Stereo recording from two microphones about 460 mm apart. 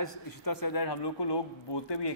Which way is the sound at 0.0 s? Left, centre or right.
Left.